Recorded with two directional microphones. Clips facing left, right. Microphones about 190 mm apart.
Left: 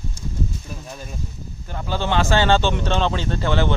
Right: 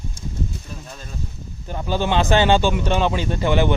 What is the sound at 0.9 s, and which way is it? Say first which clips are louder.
Speech: left 3 dB; 10° left (ahead or behind).